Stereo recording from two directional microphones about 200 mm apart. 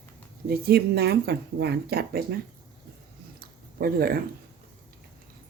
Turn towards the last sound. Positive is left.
turn(degrees=-50)  # may be behind; listen again after turning